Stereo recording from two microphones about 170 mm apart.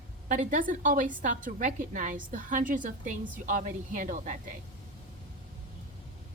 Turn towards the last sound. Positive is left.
turn(degrees=-50)  # may be behind; listen again after turning